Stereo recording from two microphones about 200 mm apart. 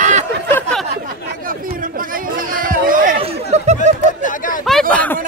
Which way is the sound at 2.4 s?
45° right (ahead or behind).